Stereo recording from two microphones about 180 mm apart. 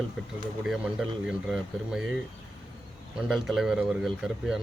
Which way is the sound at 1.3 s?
5° right (ahead or behind).